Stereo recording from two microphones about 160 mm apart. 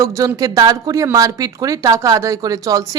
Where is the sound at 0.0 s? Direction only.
20° right (ahead or behind).